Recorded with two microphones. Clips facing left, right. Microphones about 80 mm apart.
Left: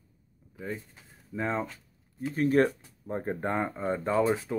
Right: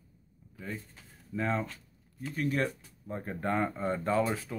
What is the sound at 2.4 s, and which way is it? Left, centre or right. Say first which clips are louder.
Speech: left 7 dB; left.